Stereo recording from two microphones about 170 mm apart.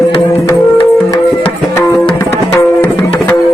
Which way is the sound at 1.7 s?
15° left (ahead or behind).